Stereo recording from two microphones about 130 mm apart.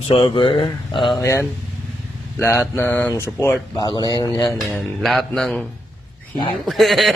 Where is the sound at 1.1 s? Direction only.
20° left (ahead or behind).